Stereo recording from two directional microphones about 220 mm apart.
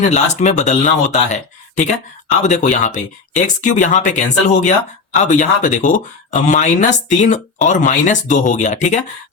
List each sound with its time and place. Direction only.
0.0 s speech: 30° left (ahead or behind)